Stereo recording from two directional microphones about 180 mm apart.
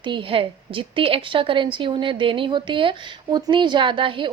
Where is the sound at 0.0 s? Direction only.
25° right (ahead or behind).